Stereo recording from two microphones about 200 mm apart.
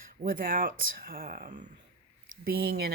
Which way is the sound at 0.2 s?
45° right (ahead or behind).